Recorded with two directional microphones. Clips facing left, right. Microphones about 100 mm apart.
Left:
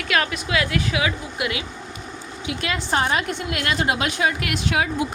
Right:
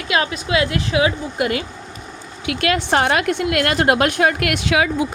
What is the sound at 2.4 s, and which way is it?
A woman's voice, 65° right (ahead or behind).